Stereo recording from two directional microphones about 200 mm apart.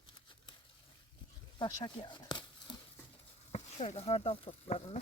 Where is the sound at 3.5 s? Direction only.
35° left (ahead or behind).